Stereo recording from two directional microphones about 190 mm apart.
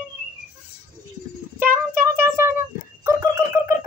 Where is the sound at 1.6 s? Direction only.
10° right (ahead or behind).